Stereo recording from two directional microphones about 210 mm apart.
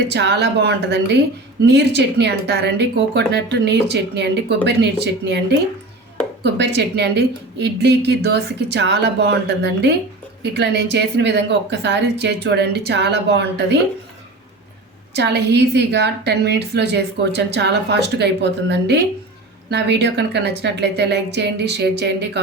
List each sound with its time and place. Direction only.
0.1 s a woman's voice: 55° right (ahead or behind)
15.1 s speech: 55° right (ahead or behind)